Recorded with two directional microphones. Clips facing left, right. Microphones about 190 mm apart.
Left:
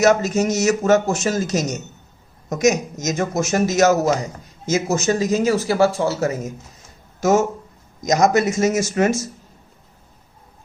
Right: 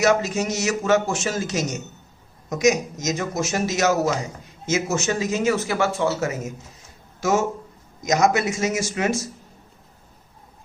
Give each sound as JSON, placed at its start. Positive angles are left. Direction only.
{"t": 0.0, "sound": "a man's voice", "side_deg": 45}